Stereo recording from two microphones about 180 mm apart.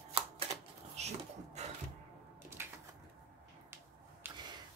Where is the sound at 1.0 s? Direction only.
35° right (ahead or behind).